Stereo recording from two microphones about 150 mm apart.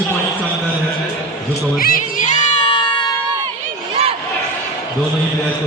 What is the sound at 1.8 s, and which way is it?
Speech, 70° left (ahead or behind).